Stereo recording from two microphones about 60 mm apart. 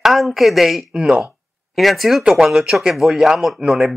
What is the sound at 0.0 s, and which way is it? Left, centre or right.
A man's voice, centre.